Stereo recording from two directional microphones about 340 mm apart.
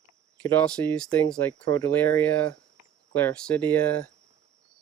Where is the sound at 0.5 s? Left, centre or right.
Centre.